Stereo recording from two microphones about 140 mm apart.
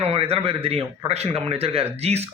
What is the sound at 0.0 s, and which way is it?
A man's voice, 45° right (ahead or behind).